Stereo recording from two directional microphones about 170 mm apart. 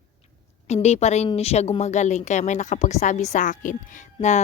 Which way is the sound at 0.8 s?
40° left (ahead or behind).